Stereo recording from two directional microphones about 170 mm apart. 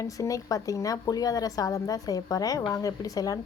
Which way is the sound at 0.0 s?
20° left (ahead or behind).